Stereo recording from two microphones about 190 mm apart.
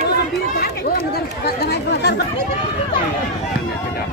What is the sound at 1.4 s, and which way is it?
Chatter, 55° left (ahead or behind).